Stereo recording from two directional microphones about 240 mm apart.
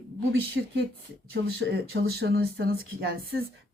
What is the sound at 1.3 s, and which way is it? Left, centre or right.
Speech, right.